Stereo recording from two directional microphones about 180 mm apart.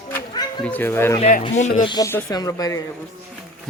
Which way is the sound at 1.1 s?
35° left (ahead or behind).